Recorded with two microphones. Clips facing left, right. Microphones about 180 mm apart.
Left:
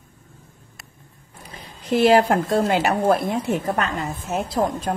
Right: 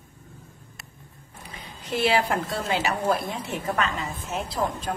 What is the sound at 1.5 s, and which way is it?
A woman's voice, 45° left (ahead or behind).